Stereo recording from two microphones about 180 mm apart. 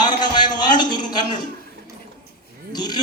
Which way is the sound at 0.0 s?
25° left (ahead or behind).